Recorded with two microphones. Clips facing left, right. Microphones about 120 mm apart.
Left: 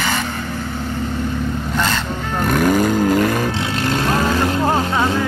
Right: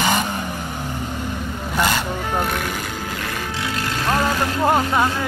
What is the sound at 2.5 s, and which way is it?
Vehicle, 45° left (ahead or behind).